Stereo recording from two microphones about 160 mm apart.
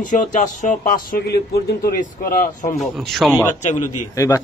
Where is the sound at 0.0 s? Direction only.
50° left (ahead or behind).